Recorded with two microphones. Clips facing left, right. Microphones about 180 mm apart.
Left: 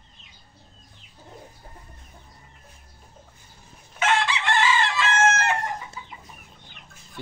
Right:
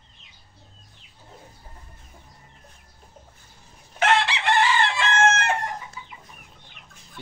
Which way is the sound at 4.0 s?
65° right (ahead or behind).